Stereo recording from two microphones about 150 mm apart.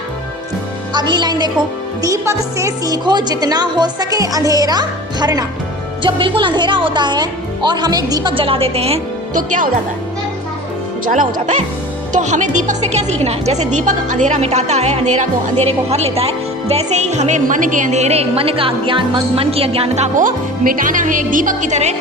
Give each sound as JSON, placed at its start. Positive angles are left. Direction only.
{"t": 0.9, "sound": "speech", "side_deg": -30}
{"t": 9.3, "sound": "speech", "side_deg": -60}
{"t": 11.0, "sound": "speech", "side_deg": -60}
{"t": 20.1, "sound": "speech", "side_deg": -65}